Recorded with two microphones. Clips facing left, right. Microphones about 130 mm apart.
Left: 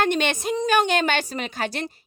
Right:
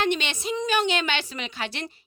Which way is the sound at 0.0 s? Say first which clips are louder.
Left 4 dB; 45° left (ahead or behind).